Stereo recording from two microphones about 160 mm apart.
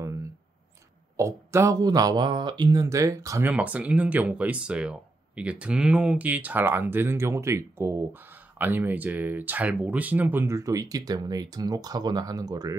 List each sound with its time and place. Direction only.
1.1 s speech: 20° right (ahead or behind)
3.4 s speech: 10° right (ahead or behind)